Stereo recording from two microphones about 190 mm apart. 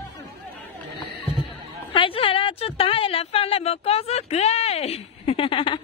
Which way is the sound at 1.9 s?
30° left (ahead or behind).